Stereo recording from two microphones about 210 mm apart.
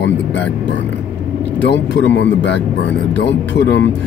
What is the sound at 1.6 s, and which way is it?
Speech, 55° left (ahead or behind).